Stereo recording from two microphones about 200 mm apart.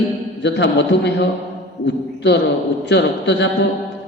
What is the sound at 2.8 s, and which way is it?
Speech, 60° left (ahead or behind).